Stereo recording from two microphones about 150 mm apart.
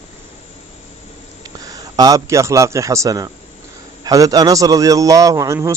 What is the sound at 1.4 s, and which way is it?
A man's voice, 25° right (ahead or behind).